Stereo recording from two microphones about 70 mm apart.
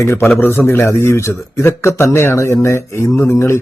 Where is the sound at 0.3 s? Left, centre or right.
Left.